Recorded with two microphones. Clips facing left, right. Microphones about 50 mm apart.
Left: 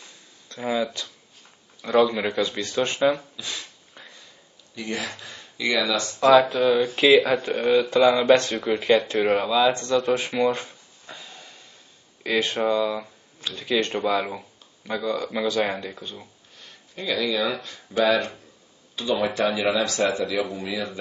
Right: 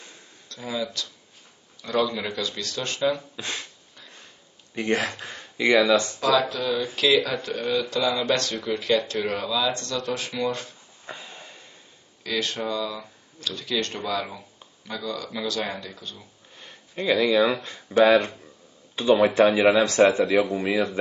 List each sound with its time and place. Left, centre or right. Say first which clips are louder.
0.5 s speech: left 5 dB; left
1.8 s speech: left 5 dB; centre
2.2 s speech: left 5 dB; left
3.3 s speech: right 2 dB; right
4.7 s speech: right 5 dB; right
6.1 s speech: left 6 dB; left
11.1 s a sound: right 3 dB; right
12.2 s speech: left 5 dB; left
16.5 s speech: right 5 dB; right